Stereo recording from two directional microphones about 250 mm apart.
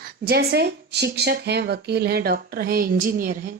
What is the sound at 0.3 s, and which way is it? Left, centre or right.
Speech, right.